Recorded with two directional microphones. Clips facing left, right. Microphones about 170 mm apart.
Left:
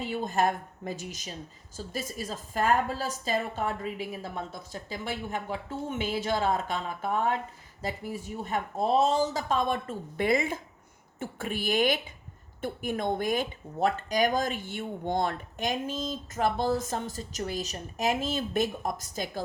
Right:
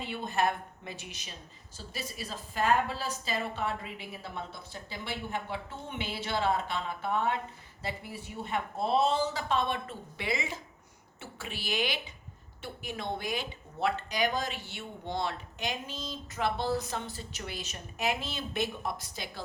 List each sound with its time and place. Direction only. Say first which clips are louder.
0.0 s speech: left 3 dB; 45° left (ahead or behind)